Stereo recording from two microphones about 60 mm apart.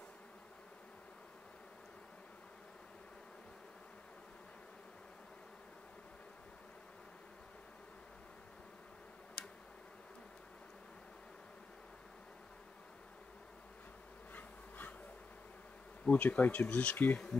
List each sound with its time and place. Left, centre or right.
9.4 s tick-tock: left
14.3 s bee: left
16.1 s speech: left